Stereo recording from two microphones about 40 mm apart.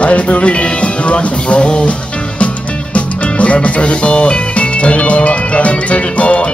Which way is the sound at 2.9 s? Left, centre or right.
Left.